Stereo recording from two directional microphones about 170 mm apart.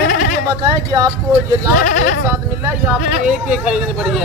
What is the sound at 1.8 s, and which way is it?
Speech, 60° left (ahead or behind).